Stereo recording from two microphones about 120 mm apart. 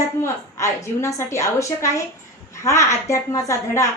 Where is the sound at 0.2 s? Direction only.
25° left (ahead or behind).